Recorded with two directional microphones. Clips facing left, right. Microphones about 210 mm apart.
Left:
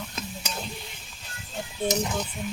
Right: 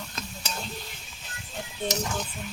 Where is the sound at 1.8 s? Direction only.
15° left (ahead or behind).